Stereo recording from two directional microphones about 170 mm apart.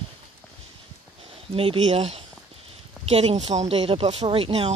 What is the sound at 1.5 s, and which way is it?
Speech, 35° right (ahead or behind).